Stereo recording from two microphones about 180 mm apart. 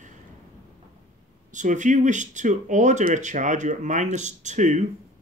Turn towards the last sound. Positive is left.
turn(degrees=-40)  # may be behind; listen again after turning